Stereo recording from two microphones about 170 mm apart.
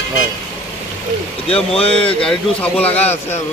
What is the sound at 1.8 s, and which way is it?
Speech, 35° left (ahead or behind).